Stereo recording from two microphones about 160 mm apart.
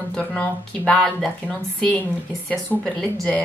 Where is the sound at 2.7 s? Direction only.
5° left (ahead or behind).